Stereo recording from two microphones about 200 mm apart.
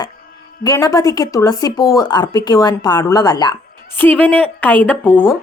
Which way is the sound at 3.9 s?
10° left (ahead or behind).